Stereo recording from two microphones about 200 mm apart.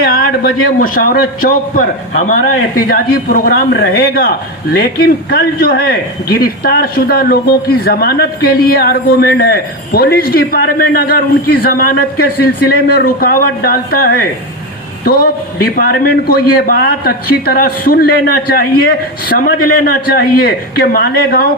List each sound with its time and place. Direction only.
0.2 s a man's voice: 45° left (ahead or behind)